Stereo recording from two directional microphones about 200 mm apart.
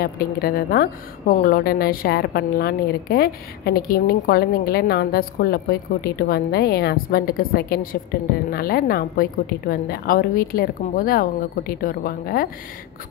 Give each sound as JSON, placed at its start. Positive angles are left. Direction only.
{"t": 0.0, "sound": "a woman's voice", "side_deg": 45}